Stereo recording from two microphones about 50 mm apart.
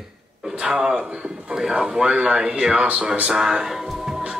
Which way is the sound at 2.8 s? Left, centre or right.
Right.